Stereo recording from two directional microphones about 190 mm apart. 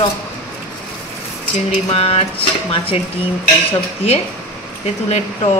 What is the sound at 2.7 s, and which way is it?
Speech, 30° left (ahead or behind).